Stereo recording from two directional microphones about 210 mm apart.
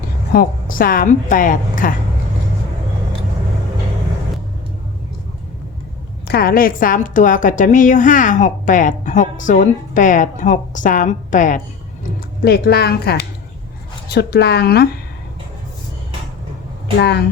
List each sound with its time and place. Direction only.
0.3 s a woman's voice: 40° left (ahead or behind)
6.2 s a woman's voice: 45° left (ahead or behind)
12.4 s a woman's voice: 50° left (ahead or behind)
17.0 s a woman's voice: 50° left (ahead or behind)